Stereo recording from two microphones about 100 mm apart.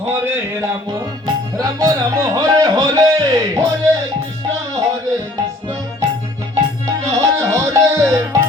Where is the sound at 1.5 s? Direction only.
40° right (ahead or behind).